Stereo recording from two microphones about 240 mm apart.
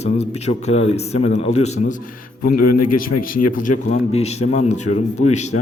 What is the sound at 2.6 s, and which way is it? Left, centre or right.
Speech, left.